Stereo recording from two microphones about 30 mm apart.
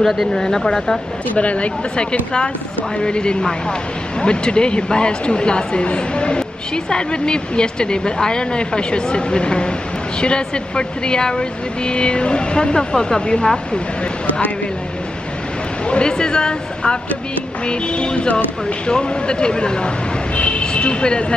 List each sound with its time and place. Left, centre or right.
0.3 s speech: centre
1.3 s speech: left
3.0 s speech: left
15.9 s speech: left
20.3 s speech: left